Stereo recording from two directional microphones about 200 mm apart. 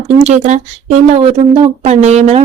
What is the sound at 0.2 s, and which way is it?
Speech, 35° right (ahead or behind).